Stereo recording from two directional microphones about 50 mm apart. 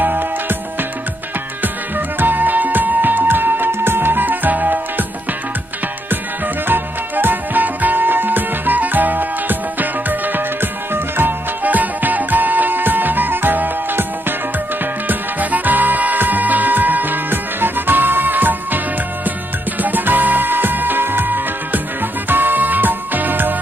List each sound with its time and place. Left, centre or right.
0.0 s music: right
1.6 s music: right
6.7 s music: right
15.0 s music: right
19.8 s music: right